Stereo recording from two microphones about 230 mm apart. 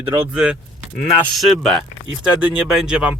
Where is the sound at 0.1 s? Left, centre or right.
Centre.